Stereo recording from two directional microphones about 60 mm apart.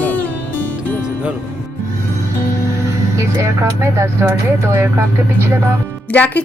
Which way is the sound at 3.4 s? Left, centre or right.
Right.